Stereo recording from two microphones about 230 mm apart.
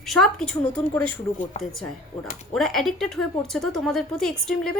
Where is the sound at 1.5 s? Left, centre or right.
Left.